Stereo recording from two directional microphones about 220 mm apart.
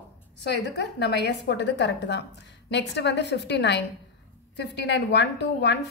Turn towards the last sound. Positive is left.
turn(degrees=50)  # may be behind; listen again after turning